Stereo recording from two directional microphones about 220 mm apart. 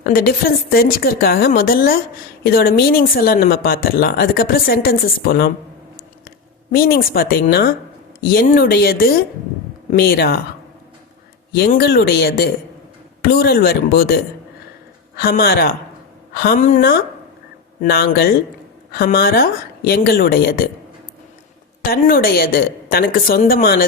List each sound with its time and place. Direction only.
0.0 s speech: 45° left (ahead or behind)
11.5 s speech: 45° left (ahead or behind)
21.8 s speech: 45° left (ahead or behind)